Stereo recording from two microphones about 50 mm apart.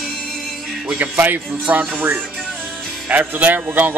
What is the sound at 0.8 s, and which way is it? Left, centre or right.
A man's voice, right.